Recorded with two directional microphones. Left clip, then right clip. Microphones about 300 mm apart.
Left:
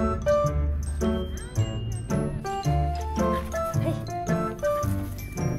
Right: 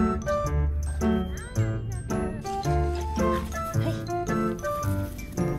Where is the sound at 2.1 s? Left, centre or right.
Centre.